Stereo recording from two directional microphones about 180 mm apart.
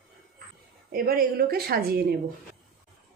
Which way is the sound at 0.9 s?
55° right (ahead or behind).